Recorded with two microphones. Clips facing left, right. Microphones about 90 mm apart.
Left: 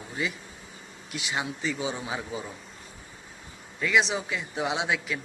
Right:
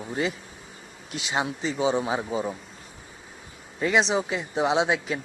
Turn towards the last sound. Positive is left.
turn(degrees=-30)  # may be behind; listen again after turning